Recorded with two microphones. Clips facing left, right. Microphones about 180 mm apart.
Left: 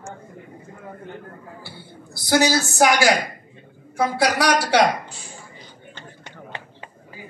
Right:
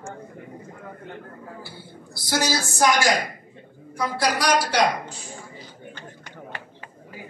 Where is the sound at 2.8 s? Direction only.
70° left (ahead or behind).